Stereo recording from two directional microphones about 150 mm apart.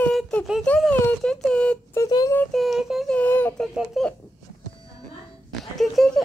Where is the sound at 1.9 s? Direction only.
25° left (ahead or behind).